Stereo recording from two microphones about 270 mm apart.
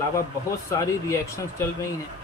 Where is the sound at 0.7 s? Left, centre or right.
Centre.